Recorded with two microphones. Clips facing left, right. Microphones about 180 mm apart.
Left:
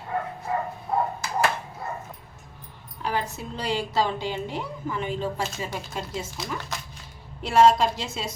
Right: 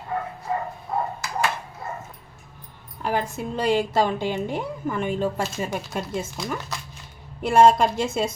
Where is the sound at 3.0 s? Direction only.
50° right (ahead or behind).